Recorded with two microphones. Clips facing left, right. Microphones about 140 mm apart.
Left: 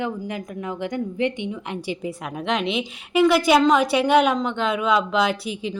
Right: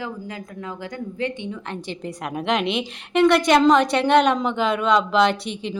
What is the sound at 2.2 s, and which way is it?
A woman's voice, centre (ahead or behind).